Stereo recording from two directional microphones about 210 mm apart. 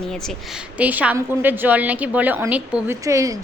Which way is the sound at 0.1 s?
Centre (ahead or behind).